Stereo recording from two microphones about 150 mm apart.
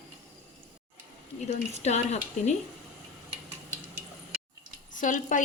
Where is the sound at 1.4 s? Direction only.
50° left (ahead or behind).